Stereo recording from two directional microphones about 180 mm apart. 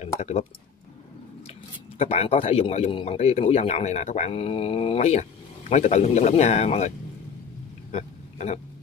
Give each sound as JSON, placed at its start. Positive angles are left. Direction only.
{"t": 0.2, "sound": "a man's voice", "side_deg": 35}
{"t": 2.0, "sound": "a man's voice", "side_deg": 35}
{"t": 7.9, "sound": "a sound", "side_deg": 40}